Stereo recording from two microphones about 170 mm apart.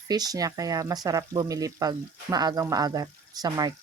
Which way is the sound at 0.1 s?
25° right (ahead or behind).